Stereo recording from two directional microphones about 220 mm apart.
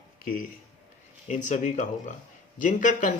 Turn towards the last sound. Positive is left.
turn(degrees=35)  # may be behind; listen again after turning